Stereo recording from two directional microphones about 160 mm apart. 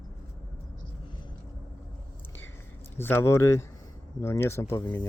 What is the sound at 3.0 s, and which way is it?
Speech, 15° left (ahead or behind).